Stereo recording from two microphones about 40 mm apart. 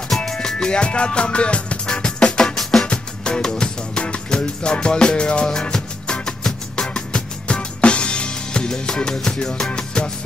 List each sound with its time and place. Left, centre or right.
0.1 s music: centre
2.9 s music: left